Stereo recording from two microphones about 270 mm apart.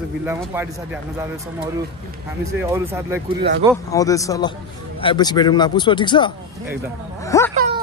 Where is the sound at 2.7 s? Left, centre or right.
Centre.